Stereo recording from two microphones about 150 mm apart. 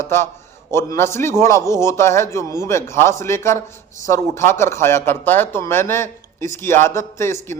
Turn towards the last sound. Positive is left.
turn(degrees=15)  # may be behind; listen again after turning